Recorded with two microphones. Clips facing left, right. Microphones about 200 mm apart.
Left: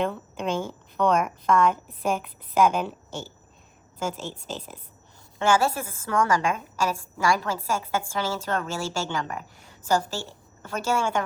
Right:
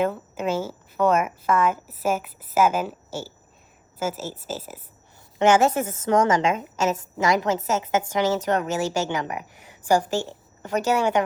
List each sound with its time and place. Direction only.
0.0 s a woman's voice: 5° right (ahead or behind)
5.4 s a woman's voice: 20° right (ahead or behind)